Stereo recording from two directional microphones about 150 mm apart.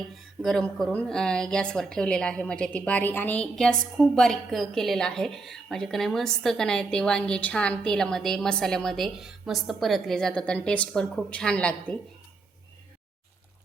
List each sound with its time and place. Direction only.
0.4 s a woman's voice: 5° left (ahead or behind)